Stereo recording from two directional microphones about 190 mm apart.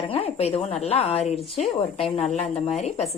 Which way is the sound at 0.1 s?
30° left (ahead or behind).